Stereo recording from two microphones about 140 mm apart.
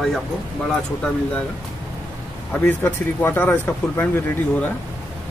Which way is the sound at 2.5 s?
15° left (ahead or behind).